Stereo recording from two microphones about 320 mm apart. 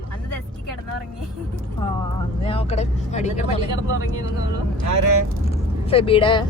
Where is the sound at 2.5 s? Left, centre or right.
Centre.